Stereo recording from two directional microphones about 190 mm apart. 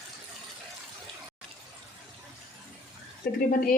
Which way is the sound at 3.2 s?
45° left (ahead or behind).